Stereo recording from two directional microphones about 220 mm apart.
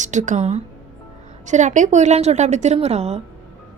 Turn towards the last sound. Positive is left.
turn(degrees=-30)  # may be behind; listen again after turning